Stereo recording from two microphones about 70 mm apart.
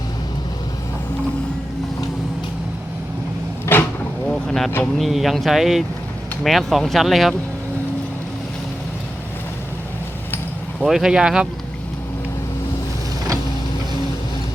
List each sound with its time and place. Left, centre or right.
3.7 s vehicle: left
4.3 s boat: centre
4.9 s speech: centre
10.8 s speech: centre